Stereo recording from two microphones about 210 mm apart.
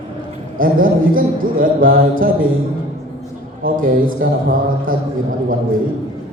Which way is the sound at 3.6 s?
40° right (ahead or behind).